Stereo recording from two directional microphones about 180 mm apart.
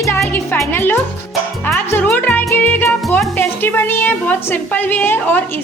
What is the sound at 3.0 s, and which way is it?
Music, centre (ahead or behind).